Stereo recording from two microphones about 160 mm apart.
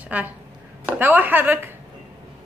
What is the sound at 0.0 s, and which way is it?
A child's voice, 10° right (ahead or behind).